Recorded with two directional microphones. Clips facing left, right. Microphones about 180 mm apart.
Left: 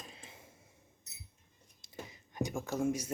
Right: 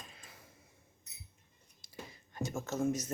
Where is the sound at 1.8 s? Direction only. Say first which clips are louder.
Left 2 dB; 20° left (ahead or behind).